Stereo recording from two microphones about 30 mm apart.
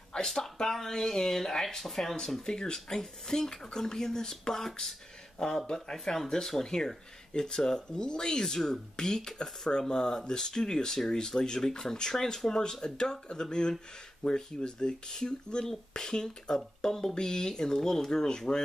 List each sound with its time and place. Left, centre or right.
0.3 s speech: centre
2.4 s speech: left